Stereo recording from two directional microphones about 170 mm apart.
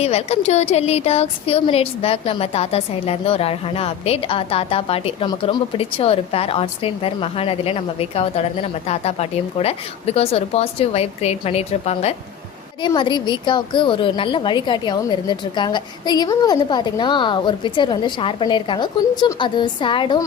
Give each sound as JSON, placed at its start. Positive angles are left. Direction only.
{"t": 0.0, "sound": "a woman's voice", "side_deg": 40}
{"t": 12.8, "sound": "a woman's voice", "side_deg": 25}